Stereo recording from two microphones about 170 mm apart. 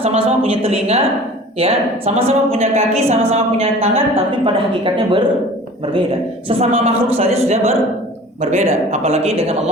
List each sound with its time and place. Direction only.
0.0 s a woman's voice: 35° right (ahead or behind)
6.5 s a woman's voice: 35° right (ahead or behind)